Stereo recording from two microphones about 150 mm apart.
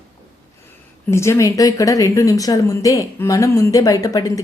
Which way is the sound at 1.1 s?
20° left (ahead or behind).